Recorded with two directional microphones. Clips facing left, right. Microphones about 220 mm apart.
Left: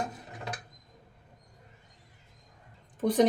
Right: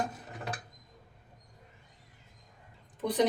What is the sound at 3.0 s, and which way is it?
Speech, 45° left (ahead or behind).